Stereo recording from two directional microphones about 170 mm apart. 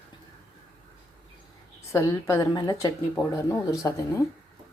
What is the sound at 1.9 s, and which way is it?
A woman's voice, 15° left (ahead or behind).